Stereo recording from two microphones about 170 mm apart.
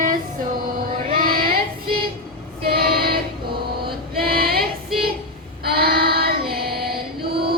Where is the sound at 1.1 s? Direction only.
55° right (ahead or behind).